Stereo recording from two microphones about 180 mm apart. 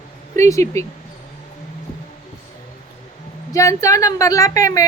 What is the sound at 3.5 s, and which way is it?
A woman's voice, 15° left (ahead or behind).